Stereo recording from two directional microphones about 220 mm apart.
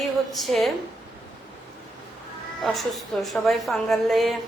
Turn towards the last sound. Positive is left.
turn(degrees=0)  # may be behind; listen again after turning